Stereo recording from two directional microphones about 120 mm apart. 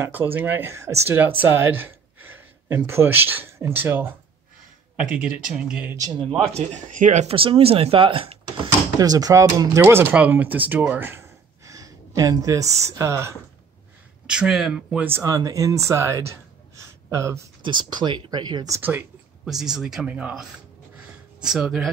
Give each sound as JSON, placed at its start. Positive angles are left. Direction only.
{"t": 0.0, "sound": "speech", "side_deg": -20}
{"t": 5.9, "sound": "speech", "side_deg": -35}
{"t": 6.5, "sound": "speech", "side_deg": -85}
{"t": 7.3, "sound": "speech", "side_deg": -50}
{"t": 8.9, "sound": "speech", "side_deg": -30}
{"t": 14.2, "sound": "speech", "side_deg": -5}
{"t": 15.3, "sound": "speech", "side_deg": -30}
{"t": 17.6, "sound": "speech", "side_deg": -40}
{"t": 18.7, "sound": "speech", "side_deg": -15}
{"t": 19.4, "sound": "speech", "side_deg": -5}